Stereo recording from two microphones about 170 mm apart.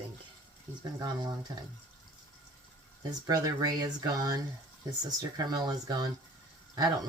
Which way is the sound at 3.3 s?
20° right (ahead or behind).